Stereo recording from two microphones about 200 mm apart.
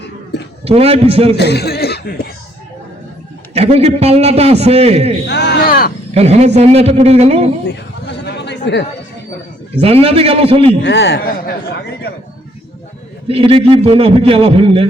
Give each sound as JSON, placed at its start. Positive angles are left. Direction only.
{"t": 0.6, "sound": "a man's voice", "side_deg": -30}
{"t": 1.4, "sound": "speech", "side_deg": 55}
{"t": 3.5, "sound": "a man's voice", "side_deg": -30}
{"t": 5.3, "sound": "speech", "side_deg": 60}
{"t": 6.1, "sound": "a man's voice", "side_deg": -30}
{"t": 8.0, "sound": "chatter", "side_deg": 60}
{"t": 9.8, "sound": "a man's voice", "side_deg": -30}
{"t": 10.8, "sound": "speech", "side_deg": 60}
{"t": 13.2, "sound": "a man's voice", "side_deg": -30}